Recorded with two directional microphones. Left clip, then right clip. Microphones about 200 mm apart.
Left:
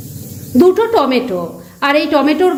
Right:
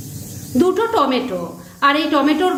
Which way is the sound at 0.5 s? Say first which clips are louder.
Left 5 dB; 25° left (ahead or behind).